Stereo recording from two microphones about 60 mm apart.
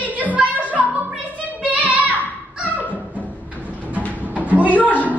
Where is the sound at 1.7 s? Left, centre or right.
Right.